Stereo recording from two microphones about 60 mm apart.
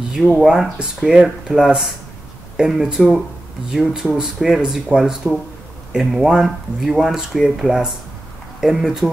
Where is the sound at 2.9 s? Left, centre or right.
Centre.